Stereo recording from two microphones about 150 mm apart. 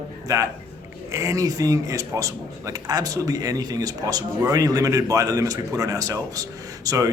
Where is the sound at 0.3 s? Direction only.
20° right (ahead or behind).